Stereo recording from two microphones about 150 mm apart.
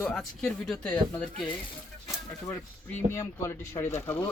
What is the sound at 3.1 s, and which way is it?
Speech, 20° left (ahead or behind).